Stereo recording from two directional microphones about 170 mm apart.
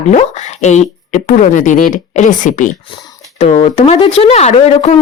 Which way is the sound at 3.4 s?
35° left (ahead or behind).